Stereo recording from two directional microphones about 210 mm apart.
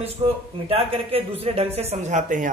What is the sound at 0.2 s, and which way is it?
Speech, 30° right (ahead or behind).